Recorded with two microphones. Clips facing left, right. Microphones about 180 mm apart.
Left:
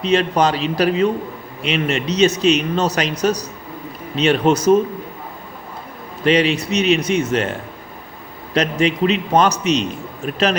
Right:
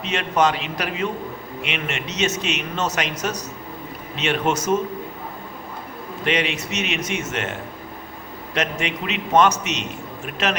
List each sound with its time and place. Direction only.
0.0 s speech: 35° left (ahead or behind)
6.2 s speech: 35° left (ahead or behind)
8.5 s speech: 35° left (ahead or behind)